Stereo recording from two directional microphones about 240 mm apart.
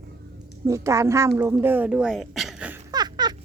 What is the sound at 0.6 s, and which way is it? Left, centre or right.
Speech, centre.